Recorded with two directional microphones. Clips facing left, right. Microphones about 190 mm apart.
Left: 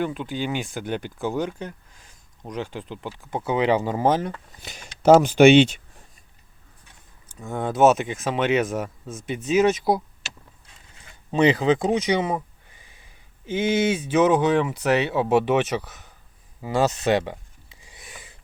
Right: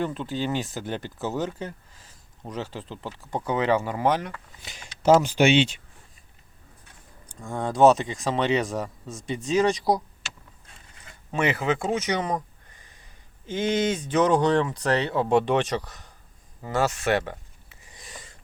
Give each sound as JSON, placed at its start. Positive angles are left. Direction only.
{"t": 0.0, "sound": "speech", "side_deg": 5}
{"t": 0.7, "sound": "speech", "side_deg": -5}
{"t": 4.6, "sound": "speech", "side_deg": 45}
{"t": 5.4, "sound": "speech", "side_deg": 60}
{"t": 7.4, "sound": "speech", "side_deg": 5}
{"t": 11.3, "sound": "speech", "side_deg": 20}
{"t": 16.6, "sound": "speech", "side_deg": 15}
{"t": 17.9, "sound": "wheeze", "side_deg": 5}